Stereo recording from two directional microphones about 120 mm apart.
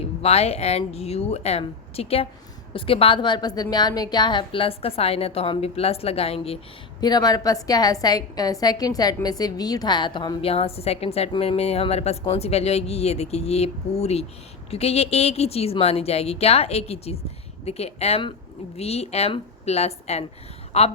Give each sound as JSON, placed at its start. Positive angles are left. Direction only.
{"t": 0.2, "sound": "a woman's voice", "side_deg": 60}
{"t": 7.0, "sound": "a woman's voice", "side_deg": 35}